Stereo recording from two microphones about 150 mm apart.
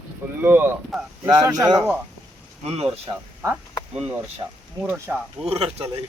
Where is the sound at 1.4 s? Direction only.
20° right (ahead or behind).